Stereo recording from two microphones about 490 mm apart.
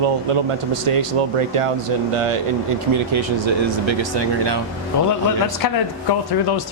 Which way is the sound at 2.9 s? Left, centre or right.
Right.